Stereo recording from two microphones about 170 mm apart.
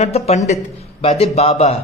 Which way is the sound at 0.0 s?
40° left (ahead or behind).